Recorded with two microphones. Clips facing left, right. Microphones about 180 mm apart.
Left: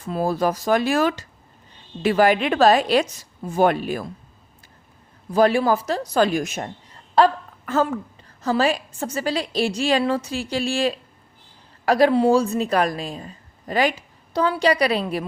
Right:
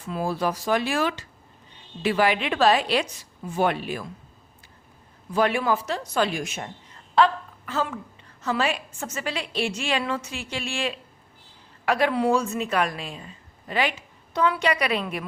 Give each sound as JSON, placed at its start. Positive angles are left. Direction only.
{"t": 0.0, "sound": "a woman's voice", "side_deg": 40}
{"t": 5.3, "sound": "a woman's voice", "side_deg": 35}
{"t": 8.4, "sound": "a woman's voice", "side_deg": 35}